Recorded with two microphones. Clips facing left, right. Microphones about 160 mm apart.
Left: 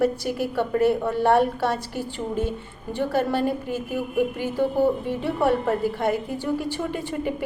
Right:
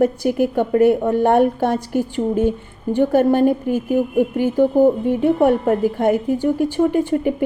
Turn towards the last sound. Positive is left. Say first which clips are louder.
# right 10 dB
turn(degrees=-50)  # may be behind; listen again after turning